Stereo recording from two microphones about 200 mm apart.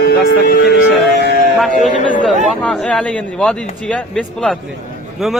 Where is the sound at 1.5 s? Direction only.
Centre (ahead or behind).